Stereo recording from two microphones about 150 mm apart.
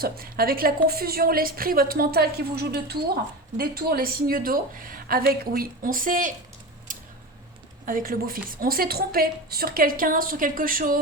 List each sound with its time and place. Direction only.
0.0 s a woman's voice: 75° right (ahead or behind); by 6.3 s 60° right (ahead or behind)
6.9 s a sound: 60° right (ahead or behind)
7.9 s a woman's voice: 70° right (ahead or behind)